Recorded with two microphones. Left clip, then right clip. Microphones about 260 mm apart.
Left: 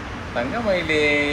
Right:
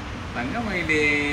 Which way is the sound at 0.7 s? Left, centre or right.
Centre.